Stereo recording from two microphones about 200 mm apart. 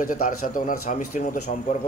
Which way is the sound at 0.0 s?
45° left (ahead or behind).